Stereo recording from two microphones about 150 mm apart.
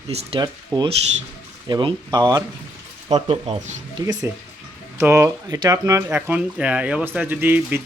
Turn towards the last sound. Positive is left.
turn(degrees=-15)  # may be behind; listen again after turning